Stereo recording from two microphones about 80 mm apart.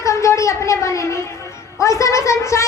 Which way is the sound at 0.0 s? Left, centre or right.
Left.